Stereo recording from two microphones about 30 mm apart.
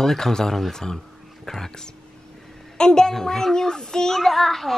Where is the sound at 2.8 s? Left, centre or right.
Left.